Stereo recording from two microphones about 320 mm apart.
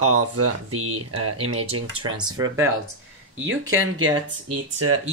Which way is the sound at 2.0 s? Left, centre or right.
Centre.